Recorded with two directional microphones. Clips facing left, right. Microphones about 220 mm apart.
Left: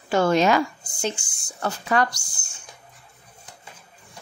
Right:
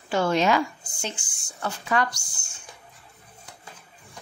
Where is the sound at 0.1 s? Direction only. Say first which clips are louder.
Left 3 dB; 45° left (ahead or behind).